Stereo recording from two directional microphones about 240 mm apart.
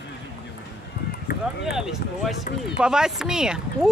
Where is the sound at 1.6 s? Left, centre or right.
Centre.